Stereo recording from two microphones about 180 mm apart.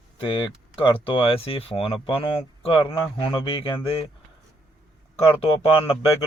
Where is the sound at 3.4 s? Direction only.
30° left (ahead or behind).